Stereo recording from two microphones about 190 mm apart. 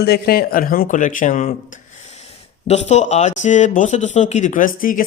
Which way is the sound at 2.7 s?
35° left (ahead or behind).